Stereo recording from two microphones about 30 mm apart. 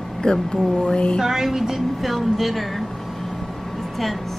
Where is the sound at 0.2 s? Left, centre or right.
Left.